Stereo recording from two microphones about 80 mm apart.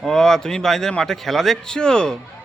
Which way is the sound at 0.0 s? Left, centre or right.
Centre.